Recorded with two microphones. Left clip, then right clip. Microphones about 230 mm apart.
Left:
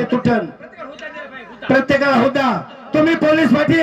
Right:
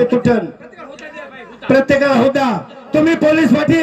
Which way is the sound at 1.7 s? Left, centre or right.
Right.